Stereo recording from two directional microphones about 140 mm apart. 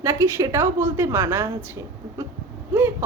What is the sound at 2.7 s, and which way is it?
Speech, 15° right (ahead or behind).